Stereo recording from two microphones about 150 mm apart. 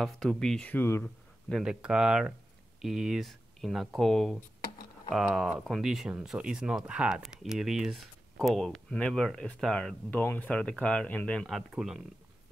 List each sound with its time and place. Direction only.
0.0 s speech: 5° left (ahead or behind)
1.0 s speech: centre (ahead or behind)